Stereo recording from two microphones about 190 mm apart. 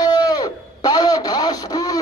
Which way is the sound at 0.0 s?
20° left (ahead or behind).